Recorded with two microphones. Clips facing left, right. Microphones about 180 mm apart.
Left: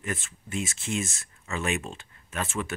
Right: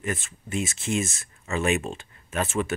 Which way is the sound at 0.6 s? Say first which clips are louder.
Right 4 dB; 5° right (ahead or behind).